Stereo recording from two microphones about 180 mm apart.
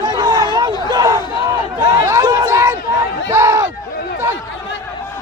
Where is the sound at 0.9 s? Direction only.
20° right (ahead or behind).